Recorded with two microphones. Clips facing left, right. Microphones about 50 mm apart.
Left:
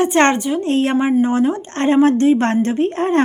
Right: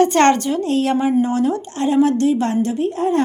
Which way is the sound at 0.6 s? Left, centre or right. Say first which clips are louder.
Left 1 dB; left.